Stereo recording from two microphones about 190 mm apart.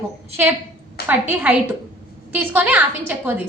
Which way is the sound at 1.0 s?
10° right (ahead or behind).